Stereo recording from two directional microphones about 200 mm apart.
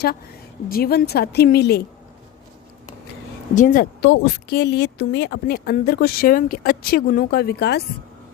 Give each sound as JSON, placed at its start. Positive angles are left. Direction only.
{"t": 0.7, "sound": "speech", "side_deg": 50}
{"t": 3.5, "sound": "speech", "side_deg": 40}